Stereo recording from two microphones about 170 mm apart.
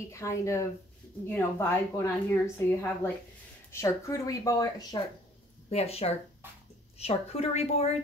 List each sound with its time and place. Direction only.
0.1 s a woman's voice: 15° left (ahead or behind)
5.7 s a woman's voice: 35° left (ahead or behind)